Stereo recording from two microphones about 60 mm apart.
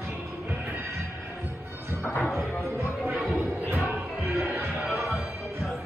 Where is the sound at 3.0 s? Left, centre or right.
Right.